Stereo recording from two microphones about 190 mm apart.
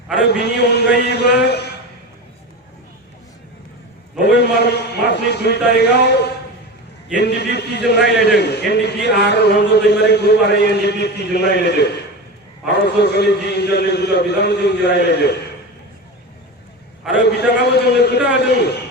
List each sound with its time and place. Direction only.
0.2 s a man's voice: 60° left (ahead or behind)
4.2 s a man's voice: 60° left (ahead or behind)
17.2 s a man's voice: 60° left (ahead or behind)